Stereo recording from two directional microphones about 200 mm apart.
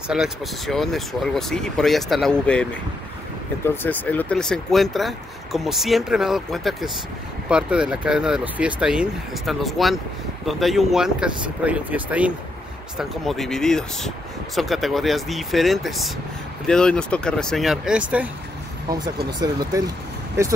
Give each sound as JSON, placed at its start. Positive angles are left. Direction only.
{"t": 0.1, "sound": "speech", "side_deg": 0}
{"t": 19.4, "sound": "speech", "side_deg": -20}